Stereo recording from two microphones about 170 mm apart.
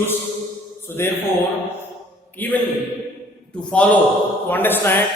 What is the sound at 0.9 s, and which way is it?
Speech, 15° left (ahead or behind).